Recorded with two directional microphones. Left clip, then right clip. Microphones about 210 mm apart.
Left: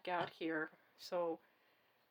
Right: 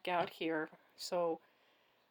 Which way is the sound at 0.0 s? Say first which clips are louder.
Right 4 dB; 35° right (ahead or behind).